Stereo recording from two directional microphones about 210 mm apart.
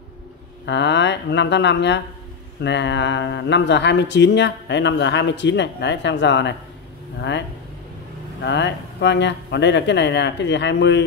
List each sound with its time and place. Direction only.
0.7 s speech: 55° left (ahead or behind)
8.5 s speech: 55° left (ahead or behind)